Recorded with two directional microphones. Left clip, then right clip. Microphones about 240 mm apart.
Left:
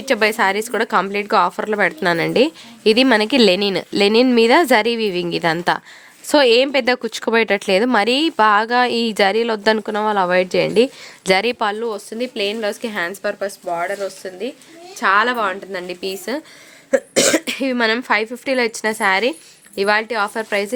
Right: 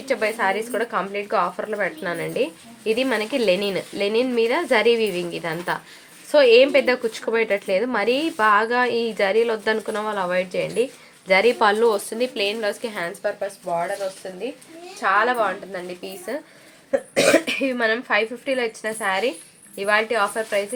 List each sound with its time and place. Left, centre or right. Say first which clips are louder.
0.0 s a woman's voice: left 6 dB; left
11.6 s speech: right 3 dB; left
15.0 s a woman's voice: left 3 dB; left